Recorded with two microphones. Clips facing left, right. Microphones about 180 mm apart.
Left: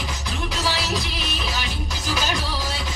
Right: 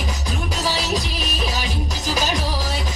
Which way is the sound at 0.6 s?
40° right (ahead or behind).